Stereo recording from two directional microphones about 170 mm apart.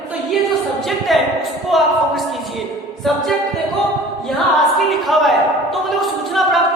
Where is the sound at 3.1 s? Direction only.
Centre (ahead or behind).